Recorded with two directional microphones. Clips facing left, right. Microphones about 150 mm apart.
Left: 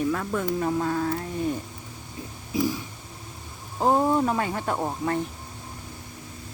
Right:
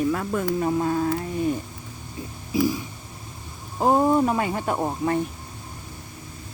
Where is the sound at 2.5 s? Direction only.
10° right (ahead or behind).